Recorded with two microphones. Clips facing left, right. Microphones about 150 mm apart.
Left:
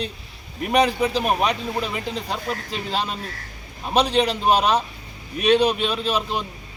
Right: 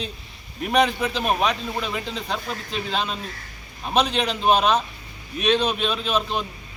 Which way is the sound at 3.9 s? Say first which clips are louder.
Left 3 dB; 35° left (ahead or behind).